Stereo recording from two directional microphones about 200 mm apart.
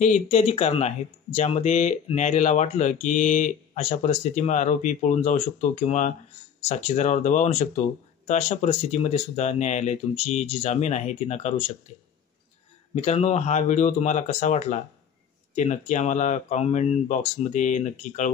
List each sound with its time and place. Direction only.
0.0 s speech: 35° left (ahead or behind)
12.9 s speech: 30° left (ahead or behind)